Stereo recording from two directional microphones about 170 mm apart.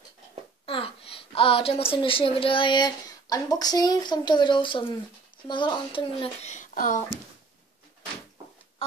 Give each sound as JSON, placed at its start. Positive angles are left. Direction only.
{"t": 0.7, "sound": "a child's voice", "side_deg": 35}